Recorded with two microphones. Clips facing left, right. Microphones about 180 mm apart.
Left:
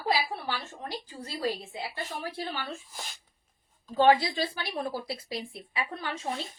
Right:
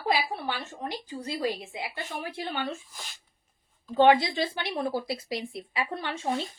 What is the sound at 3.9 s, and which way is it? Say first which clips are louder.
A woman's voice: right 2 dB; 25° right (ahead or behind).